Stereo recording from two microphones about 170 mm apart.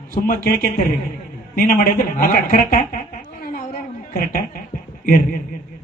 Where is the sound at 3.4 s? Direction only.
60° left (ahead or behind).